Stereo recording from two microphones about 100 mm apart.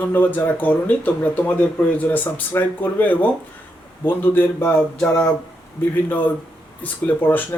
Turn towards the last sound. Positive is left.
turn(degrees=20)  # may be behind; listen again after turning